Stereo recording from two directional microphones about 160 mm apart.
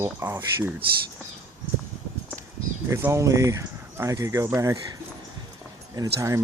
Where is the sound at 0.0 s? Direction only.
15° right (ahead or behind).